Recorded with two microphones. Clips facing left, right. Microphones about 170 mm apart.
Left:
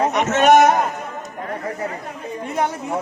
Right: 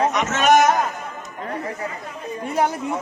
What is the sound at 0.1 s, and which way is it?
Speech, 60° left (ahead or behind).